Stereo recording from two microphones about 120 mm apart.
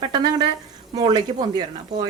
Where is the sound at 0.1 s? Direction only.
40° right (ahead or behind).